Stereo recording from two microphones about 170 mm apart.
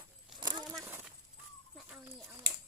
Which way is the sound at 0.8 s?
15° right (ahead or behind).